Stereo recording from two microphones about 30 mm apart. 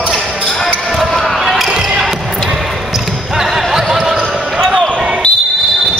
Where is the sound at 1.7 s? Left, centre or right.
Centre.